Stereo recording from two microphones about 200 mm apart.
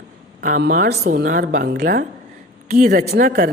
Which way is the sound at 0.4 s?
45° right (ahead or behind).